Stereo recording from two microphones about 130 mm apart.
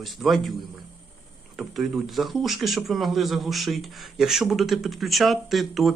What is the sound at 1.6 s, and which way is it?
A man's voice, centre (ahead or behind).